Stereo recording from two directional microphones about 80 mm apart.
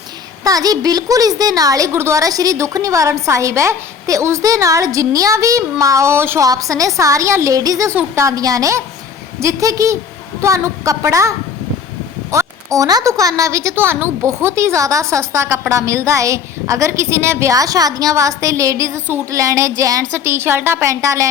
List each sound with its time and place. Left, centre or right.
0.4 s a woman's voice: right
1.9 s a woman's voice: right
2.2 s a woman's voice: right
6.4 s a woman's voice: right
7.9 s a woman's voice: right
13.7 s a woman's voice: right
20.1 s a woman's voice: right